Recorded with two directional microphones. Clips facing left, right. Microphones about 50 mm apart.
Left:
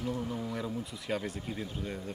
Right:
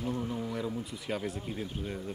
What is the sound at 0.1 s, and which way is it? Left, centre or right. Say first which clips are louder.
Speech: right 1 dB; centre.